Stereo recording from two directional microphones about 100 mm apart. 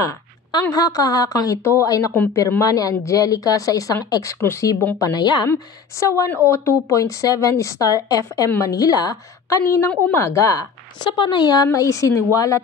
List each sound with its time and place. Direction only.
0.5 s a woman's voice: 40° left (ahead or behind)
4.9 s a woman's voice: 40° left (ahead or behind)
5.5 s a woman's voice: 30° left (ahead or behind)
11.1 s a woman's voice: 50° left (ahead or behind); by 12.2 s 35° left (ahead or behind)